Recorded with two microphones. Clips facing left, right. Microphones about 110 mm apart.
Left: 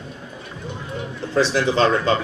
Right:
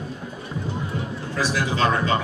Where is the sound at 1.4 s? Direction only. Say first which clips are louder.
Left 5 dB; 30° left (ahead or behind).